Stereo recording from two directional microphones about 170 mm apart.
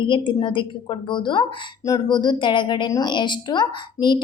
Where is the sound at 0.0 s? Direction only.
30° left (ahead or behind).